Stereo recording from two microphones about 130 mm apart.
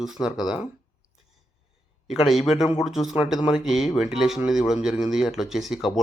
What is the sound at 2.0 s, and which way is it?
Speech, 5° right (ahead or behind).